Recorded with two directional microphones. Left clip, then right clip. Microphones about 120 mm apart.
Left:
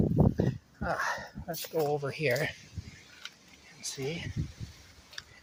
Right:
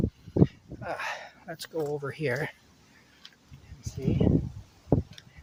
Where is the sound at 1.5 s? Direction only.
65° right (ahead or behind).